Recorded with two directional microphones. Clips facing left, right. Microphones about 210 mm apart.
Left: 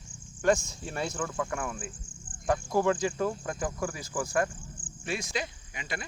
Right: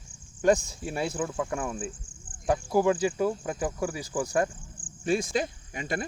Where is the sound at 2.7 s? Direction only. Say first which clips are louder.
Right 4 dB; 10° right (ahead or behind).